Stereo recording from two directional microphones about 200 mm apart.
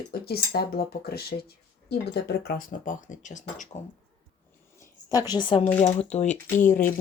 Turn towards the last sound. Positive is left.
turn(degrees=40)  # may be behind; listen again after turning